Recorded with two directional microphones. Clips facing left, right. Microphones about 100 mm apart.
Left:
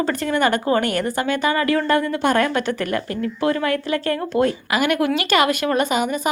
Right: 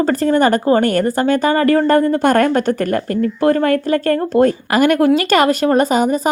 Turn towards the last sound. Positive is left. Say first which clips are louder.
# right 6 dB
turn(degrees=-40)  # may be behind; listen again after turning